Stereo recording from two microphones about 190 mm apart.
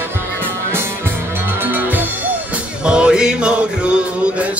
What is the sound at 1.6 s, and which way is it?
Music, 10° right (ahead or behind).